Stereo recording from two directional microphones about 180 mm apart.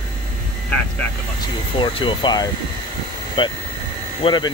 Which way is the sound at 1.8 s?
25° left (ahead or behind).